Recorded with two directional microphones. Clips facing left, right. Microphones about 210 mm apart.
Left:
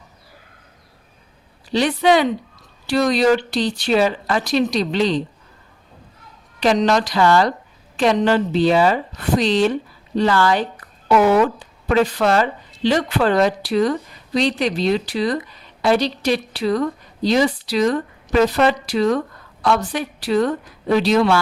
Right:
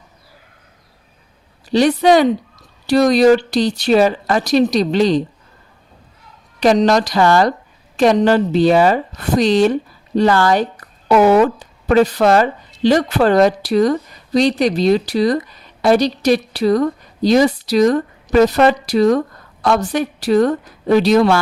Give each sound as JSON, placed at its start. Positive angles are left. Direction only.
{"t": 1.7, "sound": "speech", "side_deg": -40}
{"t": 6.6, "sound": "speech", "side_deg": -40}